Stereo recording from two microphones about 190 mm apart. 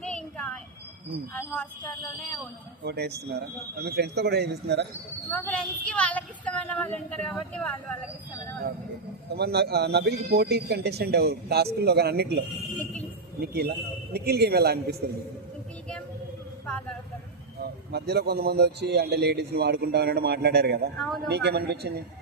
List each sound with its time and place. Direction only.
0.0 s a sound: 5° left (ahead or behind)
1.3 s a woman's voice: 10° left (ahead or behind)
2.8 s speech: 60° right (ahead or behind)
5.3 s a woman's voice: 5° left (ahead or behind)
9.3 s speech: 60° right (ahead or behind)
12.8 s a sound: 5° left (ahead or behind)
13.4 s speech: 55° right (ahead or behind)
17.6 s speech: 55° right (ahead or behind)